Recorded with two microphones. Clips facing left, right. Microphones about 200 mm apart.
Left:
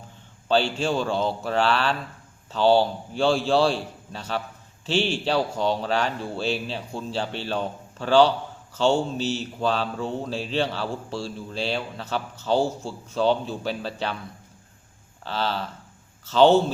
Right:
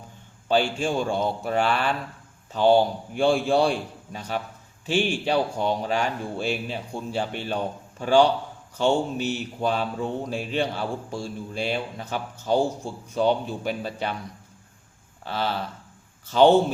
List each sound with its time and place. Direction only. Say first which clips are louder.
0.4 s speech: even; 15° right (ahead or behind)
15.2 s speech: even; 15° right (ahead or behind)